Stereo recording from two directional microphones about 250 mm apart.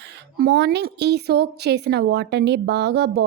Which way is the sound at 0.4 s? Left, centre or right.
Right.